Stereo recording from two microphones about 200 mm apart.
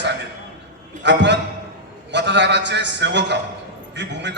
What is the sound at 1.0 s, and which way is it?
A man's voice, 65° right (ahead or behind).